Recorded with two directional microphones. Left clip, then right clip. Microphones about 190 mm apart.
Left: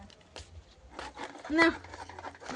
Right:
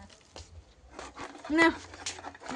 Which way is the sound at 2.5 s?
35° right (ahead or behind).